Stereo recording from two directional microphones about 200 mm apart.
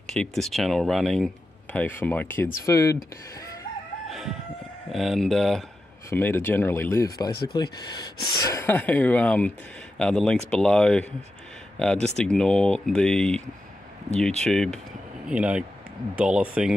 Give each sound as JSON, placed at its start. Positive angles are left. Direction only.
{"t": 0.0, "sound": "speech", "side_deg": 5}
{"t": 4.1, "sound": "chicken", "side_deg": 0}
{"t": 4.9, "sound": "speech", "side_deg": 0}
{"t": 14.4, "sound": "speech", "side_deg": 0}